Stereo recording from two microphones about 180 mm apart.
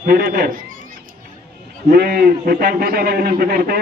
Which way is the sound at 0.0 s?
55° right (ahead or behind).